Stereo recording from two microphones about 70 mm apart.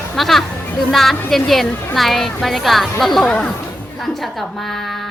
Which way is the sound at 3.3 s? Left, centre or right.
Centre.